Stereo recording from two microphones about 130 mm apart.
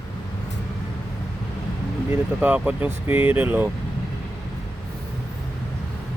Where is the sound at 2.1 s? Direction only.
15° right (ahead or behind).